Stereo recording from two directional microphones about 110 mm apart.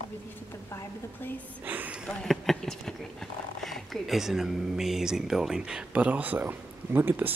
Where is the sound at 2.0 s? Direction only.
5° left (ahead or behind).